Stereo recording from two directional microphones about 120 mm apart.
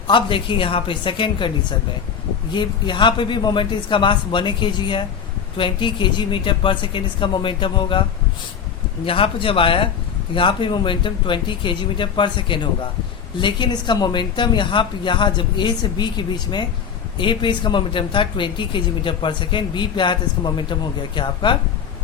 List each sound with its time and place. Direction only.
0.1 s a woman's voice: 45° left (ahead or behind)
2.5 s a woman's voice: 40° left (ahead or behind)
9.0 s a woman's voice: 50° left (ahead or behind)